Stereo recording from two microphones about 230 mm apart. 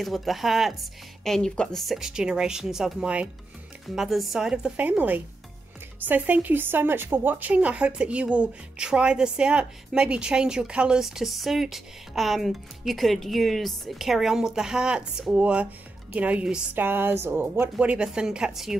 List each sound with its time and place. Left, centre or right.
0.0 s speech: centre